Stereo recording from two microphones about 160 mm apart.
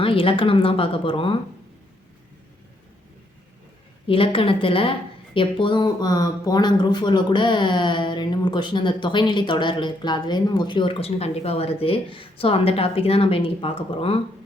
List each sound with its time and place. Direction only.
0.0 s a woman's voice: 35° left (ahead or behind)
4.0 s a woman's voice: 35° left (ahead or behind)